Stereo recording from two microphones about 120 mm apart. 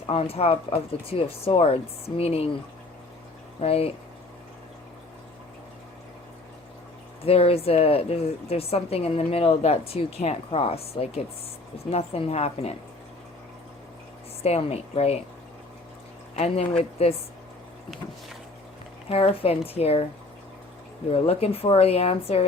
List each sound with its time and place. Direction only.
0.1 s a woman's voice: 55° left (ahead or behind)
3.6 s a woman's voice: 55° left (ahead or behind)
7.3 s a woman's voice: 55° left (ahead or behind)
14.4 s a woman's voice: 60° left (ahead or behind)
16.3 s a woman's voice: 60° left (ahead or behind)
19.0 s a woman's voice: 55° left (ahead or behind)
21.1 s a woman's voice: 55° left (ahead or behind)